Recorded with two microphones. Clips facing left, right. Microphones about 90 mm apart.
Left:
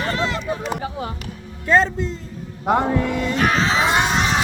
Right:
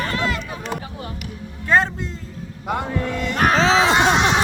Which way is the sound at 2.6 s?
40° left (ahead or behind).